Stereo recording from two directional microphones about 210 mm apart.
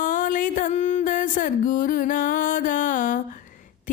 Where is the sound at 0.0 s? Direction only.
40° left (ahead or behind).